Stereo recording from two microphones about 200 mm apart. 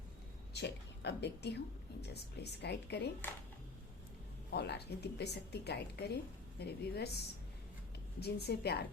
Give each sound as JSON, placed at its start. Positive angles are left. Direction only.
{"t": 0.5, "sound": "speech", "side_deg": 55}
{"t": 4.5, "sound": "a woman's voice", "side_deg": 55}